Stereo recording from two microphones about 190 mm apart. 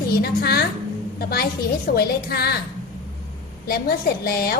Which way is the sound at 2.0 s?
55° left (ahead or behind).